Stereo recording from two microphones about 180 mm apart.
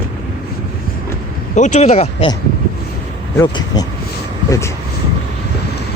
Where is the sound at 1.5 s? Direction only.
40° left (ahead or behind).